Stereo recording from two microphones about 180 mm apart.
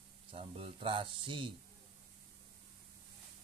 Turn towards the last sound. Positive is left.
turn(degrees=-25)  # may be behind; listen again after turning